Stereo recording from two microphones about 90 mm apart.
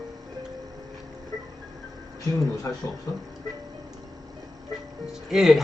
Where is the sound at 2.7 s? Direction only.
40° left (ahead or behind).